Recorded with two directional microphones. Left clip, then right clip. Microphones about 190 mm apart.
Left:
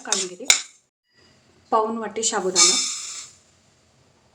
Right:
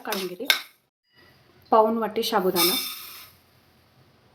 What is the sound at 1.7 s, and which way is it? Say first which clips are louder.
Speech: right 2 dB; 25° right (ahead or behind).